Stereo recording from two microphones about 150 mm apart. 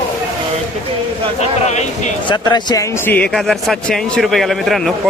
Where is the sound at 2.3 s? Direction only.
25° left (ahead or behind).